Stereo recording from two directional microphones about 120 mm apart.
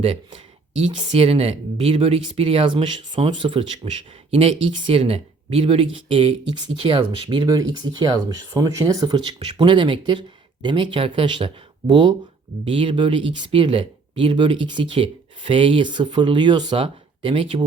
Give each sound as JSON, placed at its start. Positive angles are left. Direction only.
{"t": 0.3, "sound": "a sound", "side_deg": -60}
{"t": 1.1, "sound": "speech", "side_deg": -60}
{"t": 4.3, "sound": "speech", "side_deg": -55}
{"t": 7.4, "sound": "speech", "side_deg": -30}
{"t": 16.7, "sound": "speech", "side_deg": -50}